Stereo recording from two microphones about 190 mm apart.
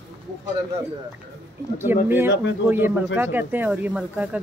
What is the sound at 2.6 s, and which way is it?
Speech, 10° right (ahead or behind).